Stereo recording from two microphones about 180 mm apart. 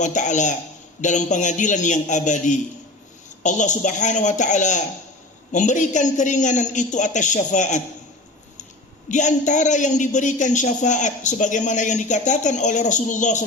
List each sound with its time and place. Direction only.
0.0 s a man's voice: 40° left (ahead or behind)
9.0 s a man's voice: 40° left (ahead or behind)